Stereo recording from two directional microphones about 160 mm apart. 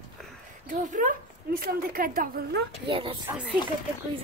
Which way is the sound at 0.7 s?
55° right (ahead or behind).